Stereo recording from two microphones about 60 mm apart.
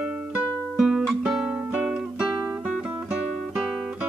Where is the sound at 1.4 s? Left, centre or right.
Centre.